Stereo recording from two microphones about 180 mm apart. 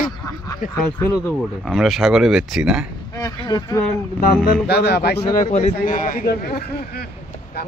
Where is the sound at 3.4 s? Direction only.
20° left (ahead or behind).